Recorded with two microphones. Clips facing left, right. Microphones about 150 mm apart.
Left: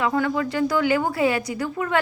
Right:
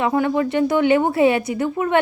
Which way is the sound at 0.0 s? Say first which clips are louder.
Right 4 dB; 25° right (ahead or behind).